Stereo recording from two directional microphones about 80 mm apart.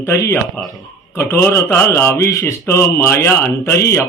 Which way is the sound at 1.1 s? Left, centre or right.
Left.